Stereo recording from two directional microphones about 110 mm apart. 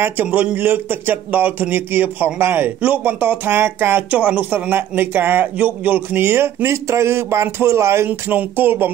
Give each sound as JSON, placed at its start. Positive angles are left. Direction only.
{"t": 0.0, "sound": "speech", "side_deg": -15}